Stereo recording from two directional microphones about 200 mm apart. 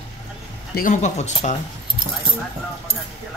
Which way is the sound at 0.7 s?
40° left (ahead or behind).